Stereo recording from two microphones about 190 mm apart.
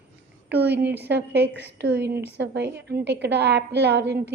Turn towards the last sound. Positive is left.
turn(degrees=-65)  # may be behind; listen again after turning